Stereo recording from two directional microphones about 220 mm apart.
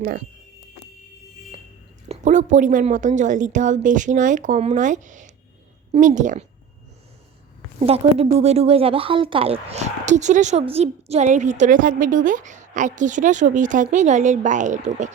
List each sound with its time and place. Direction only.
2.0 s a woman's voice: 35° right (ahead or behind)
7.8 s a woman's voice: 25° right (ahead or behind)